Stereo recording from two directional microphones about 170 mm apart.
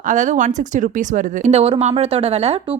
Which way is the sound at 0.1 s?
45° right (ahead or behind).